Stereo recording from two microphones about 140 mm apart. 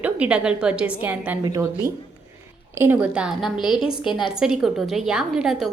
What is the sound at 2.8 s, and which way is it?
A woman's voice, 15° right (ahead or behind).